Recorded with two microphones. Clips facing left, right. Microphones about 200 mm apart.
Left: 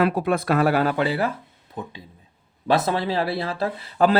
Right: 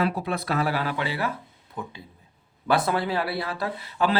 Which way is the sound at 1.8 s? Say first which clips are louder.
Left 2 dB; 25° left (ahead or behind).